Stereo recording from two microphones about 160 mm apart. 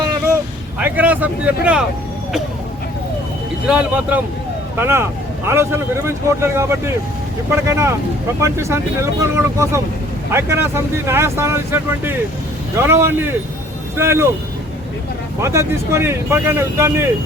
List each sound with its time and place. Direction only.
0.8 s speech: 10° right (ahead or behind)
3.7 s speech: 10° right (ahead or behind)
15.4 s speech: 15° right (ahead or behind)